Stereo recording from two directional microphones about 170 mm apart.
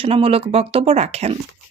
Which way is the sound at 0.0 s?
35° right (ahead or behind).